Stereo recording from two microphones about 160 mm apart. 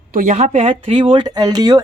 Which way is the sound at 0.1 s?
50° right (ahead or behind).